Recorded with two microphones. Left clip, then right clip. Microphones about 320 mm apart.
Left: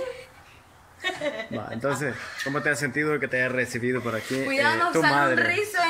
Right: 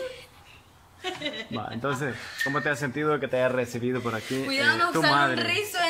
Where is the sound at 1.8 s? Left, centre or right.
Centre.